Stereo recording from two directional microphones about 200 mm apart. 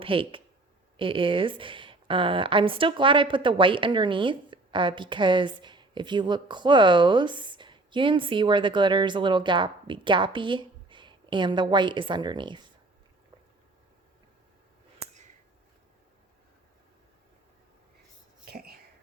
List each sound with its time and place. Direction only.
0.0 s speech: 25° right (ahead or behind)
18.4 s whispering: 50° right (ahead or behind)